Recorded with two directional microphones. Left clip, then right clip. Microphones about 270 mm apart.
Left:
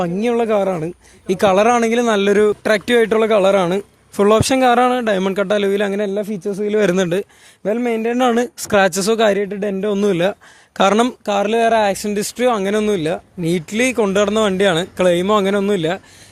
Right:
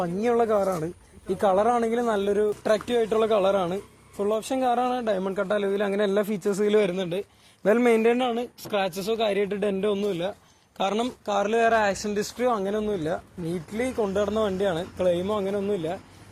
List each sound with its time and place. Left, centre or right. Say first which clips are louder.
0.0 s speech: left 6 dB; left
6.1 s a man's voice: left 3 dB; left
6.8 s speech: left 11 dB; left
7.6 s a man's voice: left 1 dB; centre
8.2 s speech: left 11 dB; left